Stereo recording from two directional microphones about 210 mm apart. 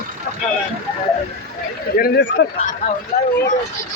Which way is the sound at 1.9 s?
50° left (ahead or behind).